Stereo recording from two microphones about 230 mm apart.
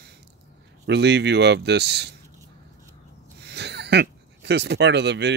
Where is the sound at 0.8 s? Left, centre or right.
Right.